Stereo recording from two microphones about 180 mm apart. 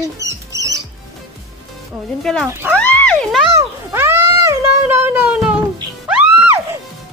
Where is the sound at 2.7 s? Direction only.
10° left (ahead or behind).